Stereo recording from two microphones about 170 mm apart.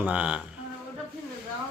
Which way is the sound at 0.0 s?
10° right (ahead or behind).